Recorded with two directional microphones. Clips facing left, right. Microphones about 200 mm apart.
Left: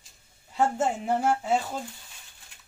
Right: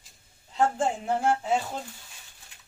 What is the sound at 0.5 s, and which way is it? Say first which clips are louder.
Speech: even; 5° left (ahead or behind).